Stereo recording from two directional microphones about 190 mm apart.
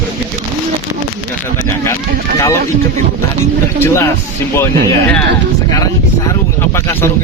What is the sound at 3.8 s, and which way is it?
Speech, 15° left (ahead or behind).